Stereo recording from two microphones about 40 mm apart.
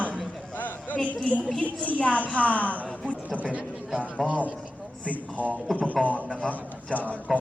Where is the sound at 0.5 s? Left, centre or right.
Left.